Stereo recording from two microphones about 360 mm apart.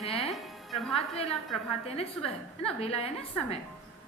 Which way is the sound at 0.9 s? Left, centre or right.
Centre.